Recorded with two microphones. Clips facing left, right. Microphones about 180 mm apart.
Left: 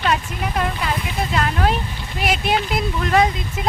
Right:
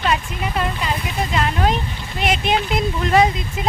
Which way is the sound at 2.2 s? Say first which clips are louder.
Right 1 dB; 5° left (ahead or behind).